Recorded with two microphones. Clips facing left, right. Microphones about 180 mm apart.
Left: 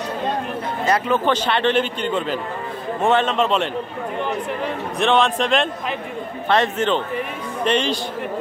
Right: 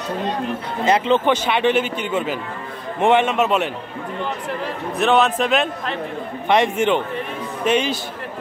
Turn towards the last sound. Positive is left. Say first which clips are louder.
# right 1 dB
turn(degrees=-10)  # may be behind; listen again after turning